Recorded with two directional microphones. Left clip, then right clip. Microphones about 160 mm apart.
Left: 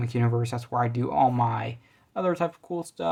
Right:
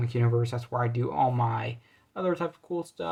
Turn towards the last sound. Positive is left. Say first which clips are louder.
# left 1 dB
turn(degrees=25)  # may be behind; listen again after turning